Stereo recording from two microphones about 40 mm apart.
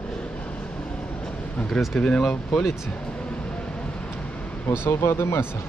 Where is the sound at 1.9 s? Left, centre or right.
Left.